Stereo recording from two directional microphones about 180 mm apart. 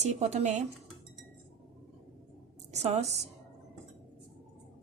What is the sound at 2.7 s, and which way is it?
Speech, 35° right (ahead or behind).